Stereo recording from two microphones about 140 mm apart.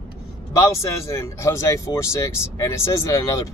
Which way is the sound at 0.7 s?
20° left (ahead or behind).